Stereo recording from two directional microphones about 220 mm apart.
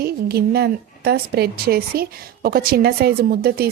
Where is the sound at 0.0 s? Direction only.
45° right (ahead or behind).